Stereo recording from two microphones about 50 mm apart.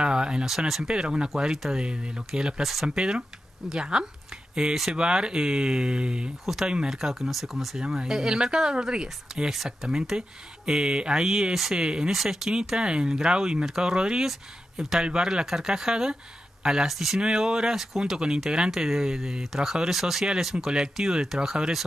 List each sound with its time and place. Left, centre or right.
0.0 s speech: centre
3.0 s speech: centre
6.4 s speech: centre
17.2 s speech: centre